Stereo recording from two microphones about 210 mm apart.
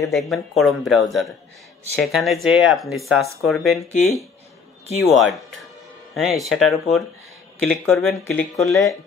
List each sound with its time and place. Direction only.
0.1 s speech: centre (ahead or behind)
2.0 s speech: centre (ahead or behind)